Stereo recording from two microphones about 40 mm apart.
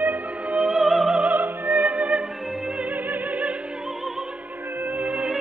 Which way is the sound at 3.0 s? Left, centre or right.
Right.